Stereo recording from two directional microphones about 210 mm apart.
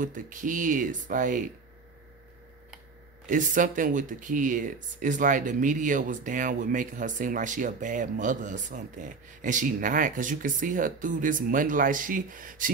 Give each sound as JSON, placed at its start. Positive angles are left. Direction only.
{"t": 0.0, "sound": "speech", "side_deg": -40}
{"t": 3.3, "sound": "speech", "side_deg": -40}